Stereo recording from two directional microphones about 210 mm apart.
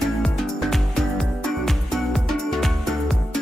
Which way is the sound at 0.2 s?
5° left (ahead or behind).